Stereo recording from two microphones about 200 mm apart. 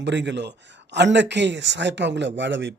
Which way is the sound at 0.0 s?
60° right (ahead or behind).